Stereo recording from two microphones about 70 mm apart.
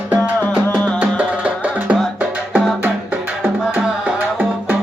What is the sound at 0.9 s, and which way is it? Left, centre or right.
Music, centre.